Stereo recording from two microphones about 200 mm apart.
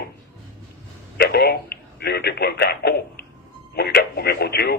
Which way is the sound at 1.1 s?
55° left (ahead or behind).